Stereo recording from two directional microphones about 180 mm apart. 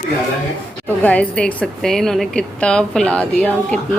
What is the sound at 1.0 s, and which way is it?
A woman's voice, 10° left (ahead or behind).